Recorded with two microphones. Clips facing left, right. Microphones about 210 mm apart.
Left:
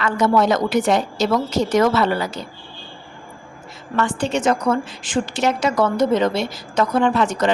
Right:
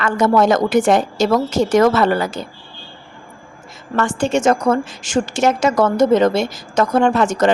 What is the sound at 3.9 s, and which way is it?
A woman's voice, 45° right (ahead or behind).